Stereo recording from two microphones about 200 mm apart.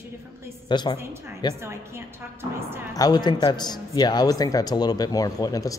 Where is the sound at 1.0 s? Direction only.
10° right (ahead or behind).